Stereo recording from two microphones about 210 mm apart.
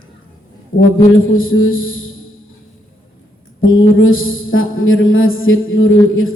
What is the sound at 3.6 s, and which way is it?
A man's voice, 70° left (ahead or behind).